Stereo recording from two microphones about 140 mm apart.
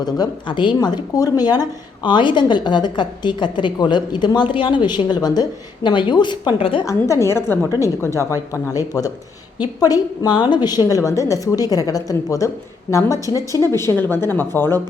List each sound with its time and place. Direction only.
0.0 s a woman's voice: 30° left (ahead or behind)
6.8 s a woman's voice: 20° left (ahead or behind)